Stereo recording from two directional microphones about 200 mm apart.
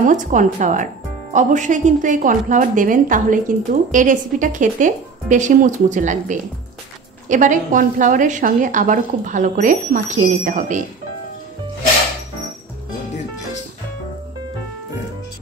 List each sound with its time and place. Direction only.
0.0 s a woman's voice: 40° right (ahead or behind)